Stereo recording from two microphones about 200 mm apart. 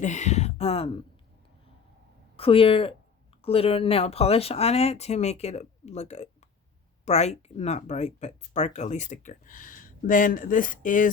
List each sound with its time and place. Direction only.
0.0 s speech: 35° left (ahead or behind)
2.3 s speech: 30° left (ahead or behind)